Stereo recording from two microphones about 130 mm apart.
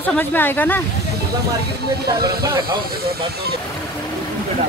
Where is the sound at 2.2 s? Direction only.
35° right (ahead or behind).